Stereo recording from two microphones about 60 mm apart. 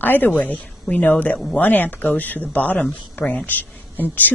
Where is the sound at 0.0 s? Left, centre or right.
Left.